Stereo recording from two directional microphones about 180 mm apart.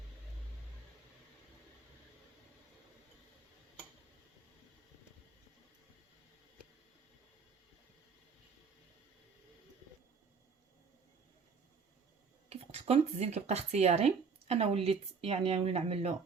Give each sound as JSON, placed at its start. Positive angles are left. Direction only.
{"t": 12.5, "sound": "speech", "side_deg": -35}